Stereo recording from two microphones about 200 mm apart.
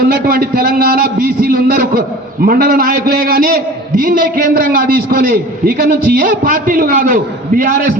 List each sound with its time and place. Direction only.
0.0 s a man's voice: 50° right (ahead or behind)